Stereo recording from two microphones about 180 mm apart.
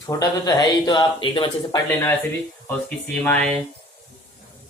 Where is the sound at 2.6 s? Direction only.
10° left (ahead or behind).